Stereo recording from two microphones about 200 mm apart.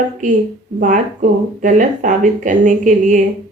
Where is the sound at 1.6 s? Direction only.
40° right (ahead or behind).